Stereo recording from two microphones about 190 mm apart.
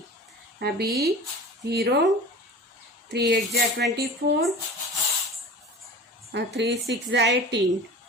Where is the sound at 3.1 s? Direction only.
60° right (ahead or behind).